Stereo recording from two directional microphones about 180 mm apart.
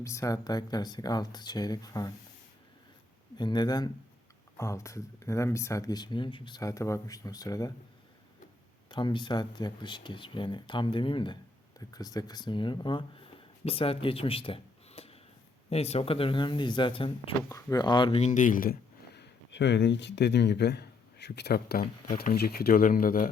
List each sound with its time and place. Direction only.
0.0 s speech: 15° left (ahead or behind)
3.3 s speech: 25° left (ahead or behind)
8.9 s speech: 25° left (ahead or behind)
18.2 s speech: 45° left (ahead or behind)